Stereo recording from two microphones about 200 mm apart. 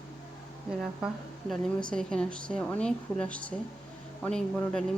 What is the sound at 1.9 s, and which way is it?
A woman's voice, 5° left (ahead or behind).